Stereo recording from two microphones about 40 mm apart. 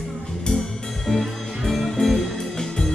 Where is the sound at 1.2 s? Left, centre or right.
Centre.